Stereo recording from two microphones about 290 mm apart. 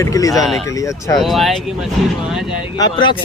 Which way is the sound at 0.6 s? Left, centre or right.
Centre.